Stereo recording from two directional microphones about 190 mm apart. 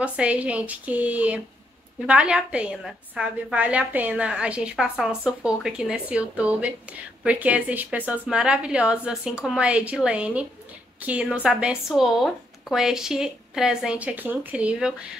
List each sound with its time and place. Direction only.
0.0 s a woman's voice: 5° right (ahead or behind)